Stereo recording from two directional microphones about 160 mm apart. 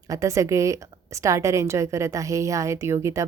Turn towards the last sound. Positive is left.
turn(degrees=-20)  # may be behind; listen again after turning